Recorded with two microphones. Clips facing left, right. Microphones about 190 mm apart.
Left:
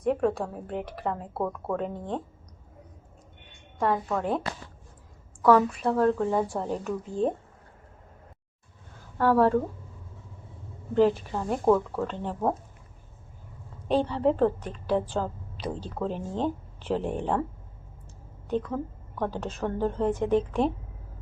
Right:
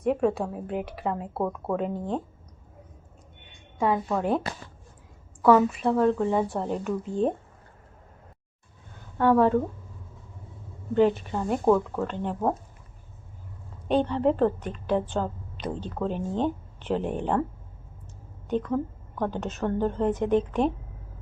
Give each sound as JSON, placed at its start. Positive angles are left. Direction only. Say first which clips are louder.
{"t": 0.0, "sound": "a woman's voice", "louder": "right 1 dB", "side_deg": -5}
{"t": 3.8, "sound": "a woman's voice", "louder": "right 1 dB", "side_deg": -5}
{"t": 9.0, "sound": "speech", "louder": "right 1 dB", "side_deg": 0}
{"t": 10.9, "sound": "a woman's voice", "louder": "right 1 dB", "side_deg": 0}
{"t": 13.8, "sound": "a woman's voice", "louder": "right 1 dB", "side_deg": 0}
{"t": 18.4, "sound": "a woman's voice", "louder": "right 2 dB", "side_deg": 0}